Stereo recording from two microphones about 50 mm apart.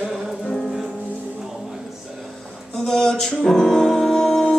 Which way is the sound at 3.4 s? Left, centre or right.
Centre.